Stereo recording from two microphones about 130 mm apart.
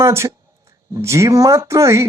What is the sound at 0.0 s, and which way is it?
Speech, 20° right (ahead or behind).